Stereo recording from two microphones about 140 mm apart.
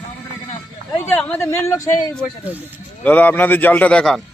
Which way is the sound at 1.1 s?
10° left (ahead or behind).